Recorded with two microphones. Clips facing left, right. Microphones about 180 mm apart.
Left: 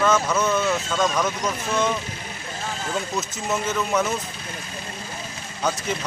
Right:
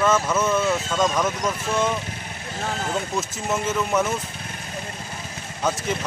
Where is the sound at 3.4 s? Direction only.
5° right (ahead or behind).